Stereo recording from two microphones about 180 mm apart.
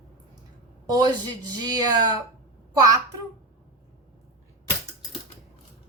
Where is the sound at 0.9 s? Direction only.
20° right (ahead or behind).